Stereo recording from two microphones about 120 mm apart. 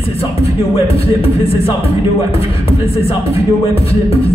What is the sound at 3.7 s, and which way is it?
Speech, 55° left (ahead or behind).